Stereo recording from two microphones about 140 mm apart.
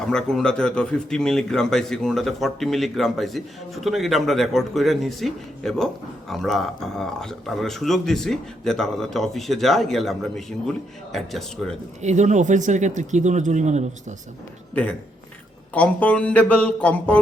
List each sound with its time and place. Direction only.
0.0 s speech: 5° left (ahead or behind)
12.0 s speech: 60° right (ahead or behind)
15.7 s speech: 10° left (ahead or behind)